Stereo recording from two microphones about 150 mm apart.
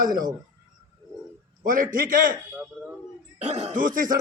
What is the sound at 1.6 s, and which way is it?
Speech, 65° right (ahead or behind).